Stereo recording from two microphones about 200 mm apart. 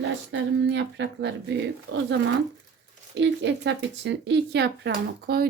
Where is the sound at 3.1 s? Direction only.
60° right (ahead or behind).